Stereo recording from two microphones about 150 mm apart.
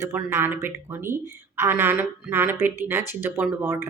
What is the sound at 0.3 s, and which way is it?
Speech, 15° right (ahead or behind).